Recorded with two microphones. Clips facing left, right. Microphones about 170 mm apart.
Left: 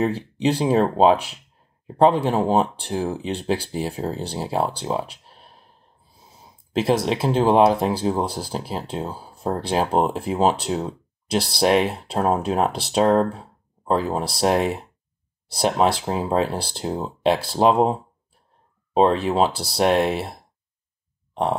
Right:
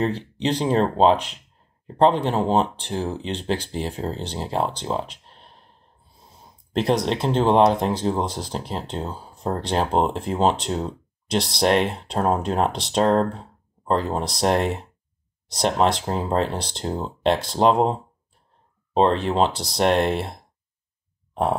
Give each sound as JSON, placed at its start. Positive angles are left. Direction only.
{"t": 0.0, "sound": "speech", "side_deg": 10}
{"t": 18.9, "sound": "speech", "side_deg": 5}